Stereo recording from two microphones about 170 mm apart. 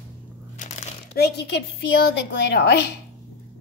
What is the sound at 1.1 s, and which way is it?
A woman's voice, 70° left (ahead or behind).